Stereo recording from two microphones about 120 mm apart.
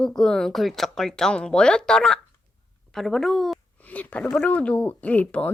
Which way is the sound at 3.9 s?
15° left (ahead or behind).